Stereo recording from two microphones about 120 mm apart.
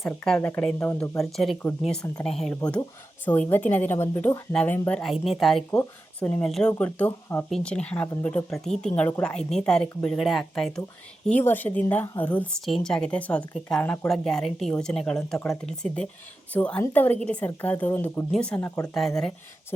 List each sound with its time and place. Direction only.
0.3 s speech: 15° left (ahead or behind)
1.2 s speech: centre (ahead or behind)
5.0 s speech: centre (ahead or behind)
6.1 s speech: 15° left (ahead or behind)
11.3 s speech: 15° left (ahead or behind)